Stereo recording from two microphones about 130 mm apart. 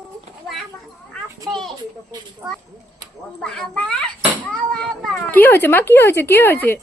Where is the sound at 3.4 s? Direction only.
5° left (ahead or behind).